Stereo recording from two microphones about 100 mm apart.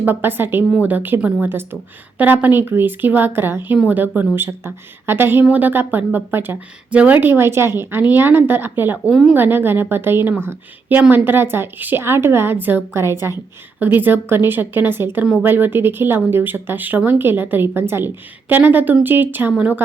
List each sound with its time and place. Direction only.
0.0 s a woman's voice: 20° right (ahead or behind)